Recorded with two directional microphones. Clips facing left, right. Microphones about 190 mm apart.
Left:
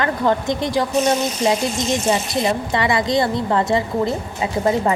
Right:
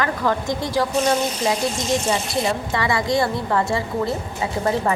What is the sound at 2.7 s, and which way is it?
A woman's voice, 20° left (ahead or behind).